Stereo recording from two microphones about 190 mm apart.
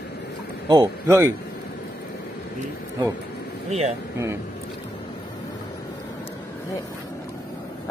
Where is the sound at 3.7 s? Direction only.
35° right (ahead or behind).